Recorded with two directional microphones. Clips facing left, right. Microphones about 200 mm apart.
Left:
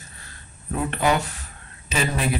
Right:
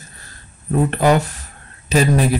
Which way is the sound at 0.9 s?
40° right (ahead or behind).